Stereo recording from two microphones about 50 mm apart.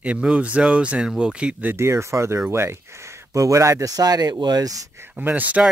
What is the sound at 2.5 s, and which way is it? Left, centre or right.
Speech, right.